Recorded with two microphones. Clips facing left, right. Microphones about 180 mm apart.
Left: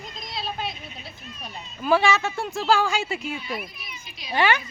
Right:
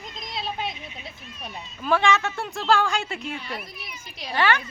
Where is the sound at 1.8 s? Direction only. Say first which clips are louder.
Left 1 dB; 5° left (ahead or behind).